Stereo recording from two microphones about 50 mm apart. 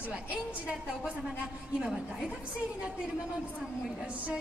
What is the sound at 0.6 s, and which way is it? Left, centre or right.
A woman's voice, right.